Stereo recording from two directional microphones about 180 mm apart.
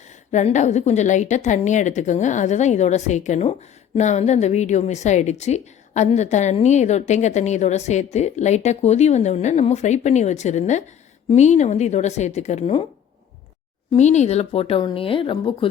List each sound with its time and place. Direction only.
0.1 s a woman's voice: 40° left (ahead or behind)
13.9 s a woman's voice: 40° left (ahead or behind)